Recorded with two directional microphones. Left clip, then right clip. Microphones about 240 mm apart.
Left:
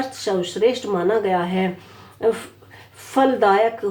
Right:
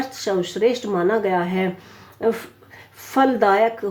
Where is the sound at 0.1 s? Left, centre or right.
Right.